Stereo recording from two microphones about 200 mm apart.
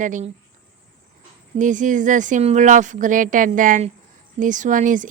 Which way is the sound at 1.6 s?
40° right (ahead or behind).